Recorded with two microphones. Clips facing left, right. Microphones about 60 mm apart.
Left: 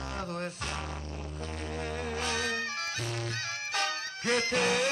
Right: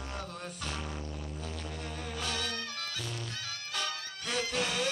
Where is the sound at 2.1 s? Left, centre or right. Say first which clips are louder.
Left 4 dB; left.